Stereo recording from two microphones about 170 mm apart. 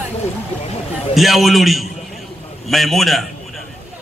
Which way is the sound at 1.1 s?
Centre (ahead or behind).